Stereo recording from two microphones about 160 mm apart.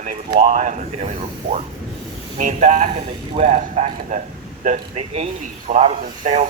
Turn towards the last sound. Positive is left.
turn(degrees=-45)  # may be behind; listen again after turning